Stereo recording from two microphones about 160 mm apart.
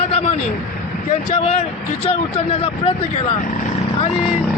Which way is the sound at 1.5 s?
40° left (ahead or behind).